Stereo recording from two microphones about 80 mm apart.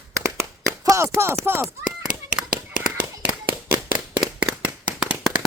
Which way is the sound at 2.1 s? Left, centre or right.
Centre.